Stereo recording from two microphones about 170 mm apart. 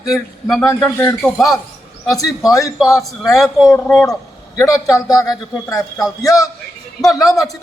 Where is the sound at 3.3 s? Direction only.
Centre (ahead or behind).